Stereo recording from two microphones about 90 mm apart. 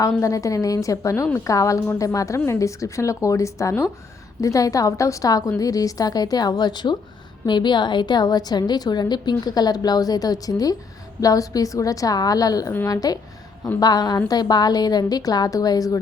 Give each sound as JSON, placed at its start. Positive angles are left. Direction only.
{"t": 0.0, "sound": "a woman's voice", "side_deg": 35}